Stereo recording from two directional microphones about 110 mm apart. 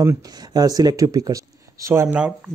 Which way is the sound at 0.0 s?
35° right (ahead or behind).